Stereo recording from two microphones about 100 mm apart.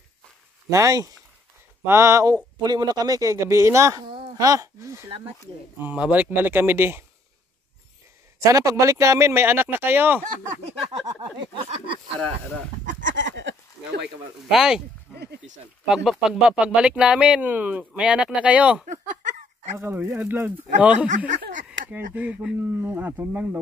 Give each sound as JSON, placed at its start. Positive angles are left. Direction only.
{"t": 0.7, "sound": "a man's voice", "side_deg": -30}
{"t": 2.6, "sound": "a man's voice", "side_deg": -40}
{"t": 5.9, "sound": "speech", "side_deg": -15}
{"t": 8.5, "sound": "speech", "side_deg": -35}
{"t": 11.1, "sound": "speech", "side_deg": -45}
{"t": 14.5, "sound": "speech", "side_deg": -5}
{"t": 15.9, "sound": "speech", "side_deg": -5}
{"t": 19.8, "sound": "speech", "side_deg": -25}
{"t": 22.8, "sound": "speech", "side_deg": -20}